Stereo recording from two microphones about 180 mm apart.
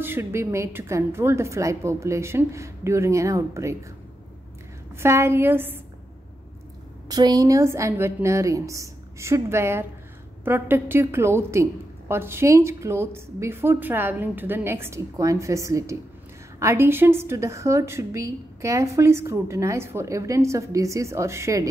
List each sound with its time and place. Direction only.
0.0 s a woman's voice: 10° right (ahead or behind)
4.9 s a woman's voice: 15° right (ahead or behind)
7.1 s a woman's voice: 20° right (ahead or behind)